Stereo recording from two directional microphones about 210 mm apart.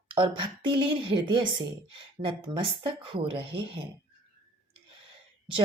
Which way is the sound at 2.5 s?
25° right (ahead or behind).